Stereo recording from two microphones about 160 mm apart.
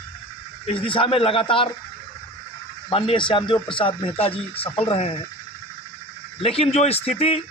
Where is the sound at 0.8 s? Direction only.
35° left (ahead or behind).